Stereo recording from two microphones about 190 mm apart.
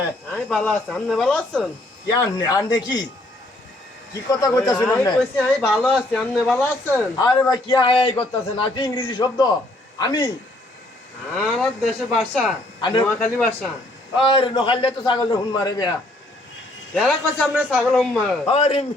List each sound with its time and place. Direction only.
0.3 s speech: 5° left (ahead or behind)
2.0 s a man's voice: 20° left (ahead or behind)
4.3 s a man's voice: 20° left (ahead or behind)
4.7 s speech: 5° left (ahead or behind)
7.2 s a man's voice: 20° left (ahead or behind)
11.3 s speech: centre (ahead or behind)
12.8 s a man's voice: 25° left (ahead or behind)
13.1 s a man's voice: 10° left (ahead or behind)
14.2 s a man's voice: 25° left (ahead or behind)
16.9 s a man's voice: 5° left (ahead or behind)
18.4 s a man's voice: 30° left (ahead or behind)